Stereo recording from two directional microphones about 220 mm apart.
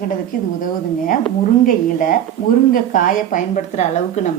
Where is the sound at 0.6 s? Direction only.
40° left (ahead or behind).